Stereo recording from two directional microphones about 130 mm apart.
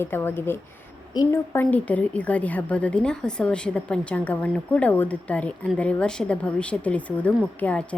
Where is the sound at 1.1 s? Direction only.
25° left (ahead or behind).